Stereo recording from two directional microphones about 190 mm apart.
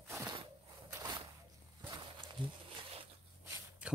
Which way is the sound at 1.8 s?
20° right (ahead or behind).